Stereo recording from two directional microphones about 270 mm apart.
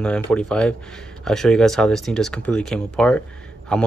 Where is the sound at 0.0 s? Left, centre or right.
Centre.